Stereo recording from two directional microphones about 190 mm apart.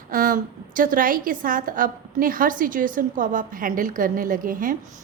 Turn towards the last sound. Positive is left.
turn(degrees=-45)  # may be behind; listen again after turning